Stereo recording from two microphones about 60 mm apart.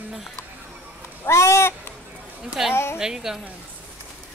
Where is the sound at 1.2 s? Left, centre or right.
Left.